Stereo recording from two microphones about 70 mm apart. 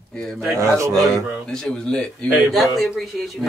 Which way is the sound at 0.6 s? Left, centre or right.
Right.